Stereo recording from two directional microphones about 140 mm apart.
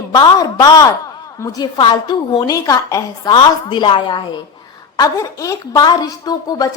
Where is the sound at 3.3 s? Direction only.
35° left (ahead or behind).